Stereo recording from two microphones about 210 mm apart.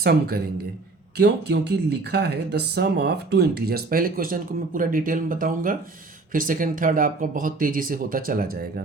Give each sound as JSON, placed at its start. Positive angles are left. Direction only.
{"t": 0.0, "sound": "speech", "side_deg": -45}